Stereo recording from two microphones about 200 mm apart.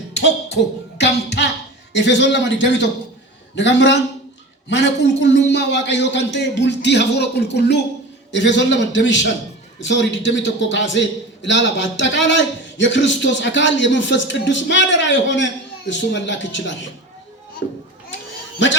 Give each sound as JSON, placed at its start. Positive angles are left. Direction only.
{"t": 0.1, "sound": "music", "side_deg": 60}
{"t": 1.9, "sound": "a man's voice", "side_deg": 60}